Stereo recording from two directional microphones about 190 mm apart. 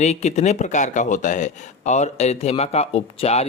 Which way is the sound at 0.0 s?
35° left (ahead or behind).